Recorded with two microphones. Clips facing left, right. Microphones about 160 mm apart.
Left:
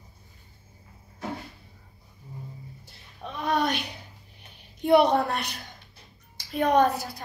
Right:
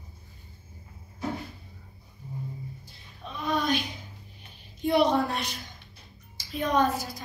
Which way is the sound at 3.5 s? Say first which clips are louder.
Left 1 dB; 70° left (ahead or behind).